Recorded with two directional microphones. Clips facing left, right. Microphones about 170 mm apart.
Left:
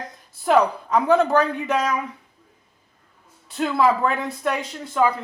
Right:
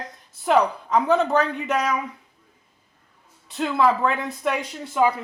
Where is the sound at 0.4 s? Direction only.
Centre (ahead or behind).